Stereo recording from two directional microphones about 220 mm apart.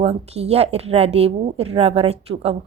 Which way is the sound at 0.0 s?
30° right (ahead or behind).